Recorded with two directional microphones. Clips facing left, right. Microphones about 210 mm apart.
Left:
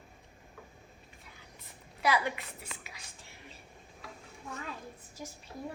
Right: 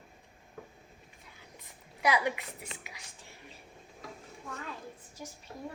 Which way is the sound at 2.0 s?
15° right (ahead or behind).